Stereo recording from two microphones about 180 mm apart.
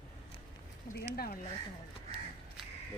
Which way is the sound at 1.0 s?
55° left (ahead or behind).